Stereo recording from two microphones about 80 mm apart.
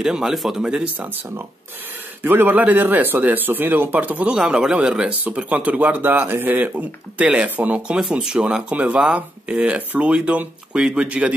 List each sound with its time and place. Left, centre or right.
0.0 s speech: centre
0.9 s speech: right
8.0 s speech: centre